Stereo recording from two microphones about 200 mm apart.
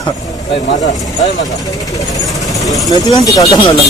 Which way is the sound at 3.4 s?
25° left (ahead or behind).